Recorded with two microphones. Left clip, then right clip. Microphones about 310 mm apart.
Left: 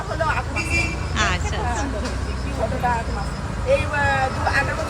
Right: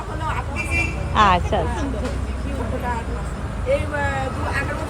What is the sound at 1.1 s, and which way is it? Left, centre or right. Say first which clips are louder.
Speech: right 9 dB; centre.